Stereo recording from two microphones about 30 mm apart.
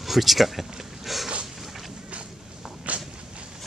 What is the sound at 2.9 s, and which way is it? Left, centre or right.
Walk, right.